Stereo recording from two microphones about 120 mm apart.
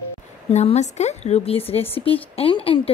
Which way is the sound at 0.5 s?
70° left (ahead or behind).